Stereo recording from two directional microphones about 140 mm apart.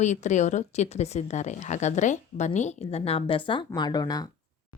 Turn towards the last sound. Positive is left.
turn(degrees=30)  # may be behind; listen again after turning